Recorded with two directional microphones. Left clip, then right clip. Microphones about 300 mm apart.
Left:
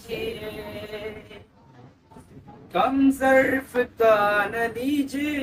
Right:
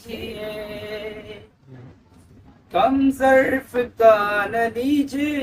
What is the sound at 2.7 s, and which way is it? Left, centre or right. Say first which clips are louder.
Male singing: right 3 dB; centre.